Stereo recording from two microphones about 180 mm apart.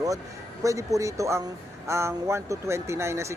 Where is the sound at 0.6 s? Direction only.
15° right (ahead or behind).